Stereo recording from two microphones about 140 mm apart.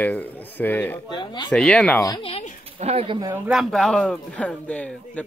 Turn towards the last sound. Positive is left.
turn(degrees=10)  # may be behind; listen again after turning